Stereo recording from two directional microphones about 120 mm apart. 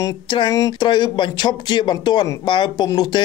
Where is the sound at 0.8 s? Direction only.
40° left (ahead or behind).